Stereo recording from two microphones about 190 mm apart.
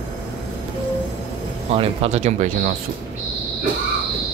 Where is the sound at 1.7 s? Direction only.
30° right (ahead or behind).